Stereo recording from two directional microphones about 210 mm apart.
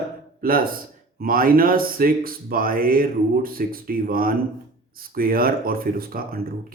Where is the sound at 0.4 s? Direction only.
45° right (ahead or behind).